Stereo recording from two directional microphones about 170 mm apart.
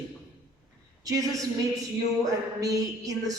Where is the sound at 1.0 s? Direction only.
20° right (ahead or behind).